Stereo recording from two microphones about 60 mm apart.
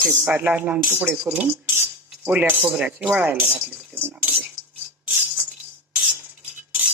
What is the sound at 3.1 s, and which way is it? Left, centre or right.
Speech, right.